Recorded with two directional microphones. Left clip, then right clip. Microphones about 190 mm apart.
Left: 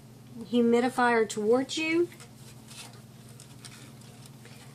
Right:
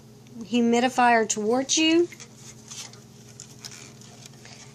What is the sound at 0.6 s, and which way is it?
Speech, 25° right (ahead or behind).